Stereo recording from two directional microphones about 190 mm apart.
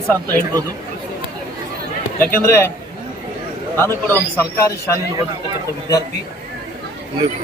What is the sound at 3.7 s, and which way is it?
A man's voice, 10° left (ahead or behind).